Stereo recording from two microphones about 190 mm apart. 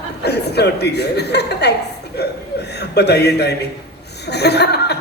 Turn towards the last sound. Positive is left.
turn(degrees=60)  # may be behind; listen again after turning